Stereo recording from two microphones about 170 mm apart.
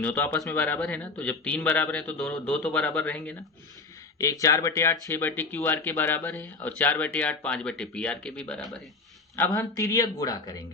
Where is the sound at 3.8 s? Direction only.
20° left (ahead or behind); by 8.9 s 5° left (ahead or behind).